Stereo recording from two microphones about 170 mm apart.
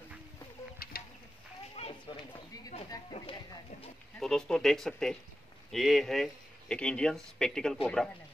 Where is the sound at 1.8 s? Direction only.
35° left (ahead or behind).